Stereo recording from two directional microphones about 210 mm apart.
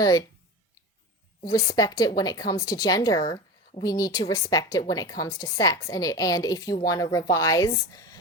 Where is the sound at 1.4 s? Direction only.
15° left (ahead or behind).